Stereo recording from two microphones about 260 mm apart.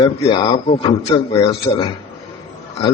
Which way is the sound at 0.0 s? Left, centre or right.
Centre.